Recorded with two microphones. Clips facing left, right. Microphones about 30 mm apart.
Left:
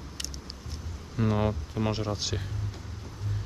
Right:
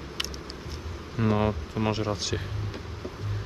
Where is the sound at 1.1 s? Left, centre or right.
Right.